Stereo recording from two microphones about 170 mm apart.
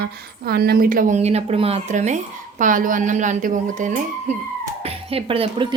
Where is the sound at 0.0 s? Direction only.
65° right (ahead or behind); by 4.0 s 45° right (ahead or behind).